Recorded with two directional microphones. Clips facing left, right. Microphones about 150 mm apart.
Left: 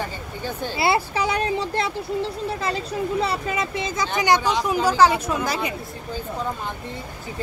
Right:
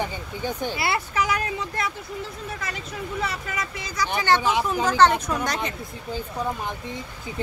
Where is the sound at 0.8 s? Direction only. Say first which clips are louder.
Left 7 dB; 30° left (ahead or behind).